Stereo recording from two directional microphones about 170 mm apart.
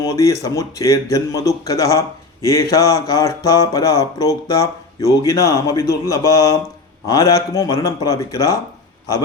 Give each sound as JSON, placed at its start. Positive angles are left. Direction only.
{"t": 0.0, "sound": "speech", "side_deg": 20}